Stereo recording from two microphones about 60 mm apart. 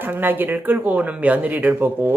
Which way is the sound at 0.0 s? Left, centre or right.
Right.